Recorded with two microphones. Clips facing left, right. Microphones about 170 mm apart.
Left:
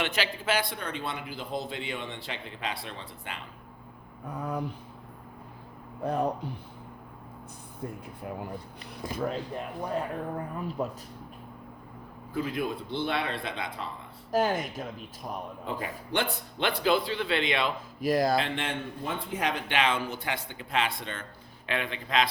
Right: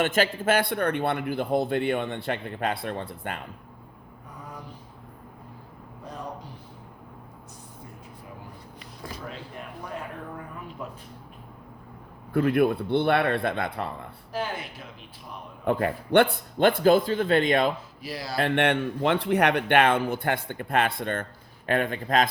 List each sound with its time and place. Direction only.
0.0 s a man's voice: 45° right (ahead or behind)
4.4 s a sound: 65° left (ahead or behind)
6.0 s speech: 60° left (ahead or behind)
10.8 s speech: 40° left (ahead or behind)
12.3 s a man's voice: 60° right (ahead or behind)
14.3 s speech: 45° left (ahead or behind)
15.6 s a man's voice: 60° right (ahead or behind)
18.0 s speech: 50° left (ahead or behind)
18.3 s a man's voice: 60° right (ahead or behind)